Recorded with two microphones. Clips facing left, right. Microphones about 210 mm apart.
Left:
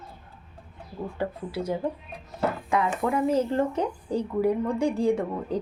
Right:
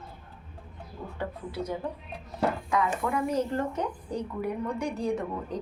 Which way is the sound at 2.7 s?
25° left (ahead or behind).